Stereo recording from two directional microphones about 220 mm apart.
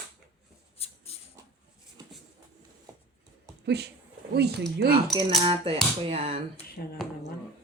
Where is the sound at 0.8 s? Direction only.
30° left (ahead or behind).